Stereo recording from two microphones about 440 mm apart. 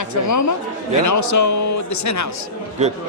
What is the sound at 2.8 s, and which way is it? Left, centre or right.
Speech, centre.